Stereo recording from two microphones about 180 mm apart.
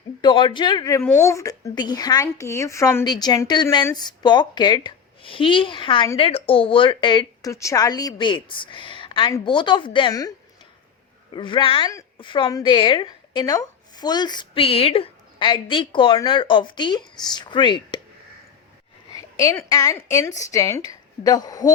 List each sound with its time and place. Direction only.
0.2 s a woman's voice: 25° left (ahead or behind)
11.3 s a woman's voice: 25° left (ahead or behind)
19.1 s a woman's voice: 20° left (ahead or behind)